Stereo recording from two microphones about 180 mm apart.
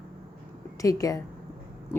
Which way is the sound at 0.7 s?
20° left (ahead or behind).